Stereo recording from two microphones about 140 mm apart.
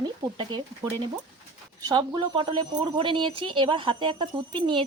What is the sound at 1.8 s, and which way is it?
Speech, 30° right (ahead or behind).